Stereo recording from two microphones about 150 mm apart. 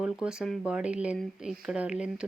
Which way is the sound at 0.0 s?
5° right (ahead or behind).